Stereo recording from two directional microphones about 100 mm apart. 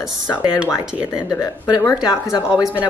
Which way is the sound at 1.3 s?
35° left (ahead or behind).